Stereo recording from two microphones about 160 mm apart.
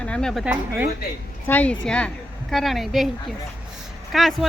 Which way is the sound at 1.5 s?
10° left (ahead or behind).